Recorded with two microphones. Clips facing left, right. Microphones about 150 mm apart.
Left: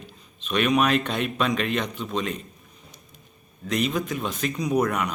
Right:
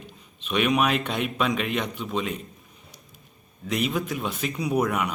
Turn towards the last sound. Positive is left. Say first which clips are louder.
# left 1 dB
turn(degrees=-5)  # may be behind; listen again after turning